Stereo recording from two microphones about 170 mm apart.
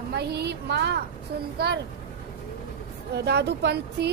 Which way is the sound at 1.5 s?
70° right (ahead or behind).